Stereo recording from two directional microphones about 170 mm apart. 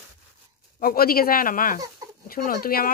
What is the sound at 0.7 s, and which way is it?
A woman's voice, 60° left (ahead or behind).